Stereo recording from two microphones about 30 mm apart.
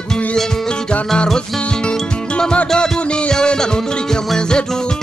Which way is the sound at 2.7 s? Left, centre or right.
Left.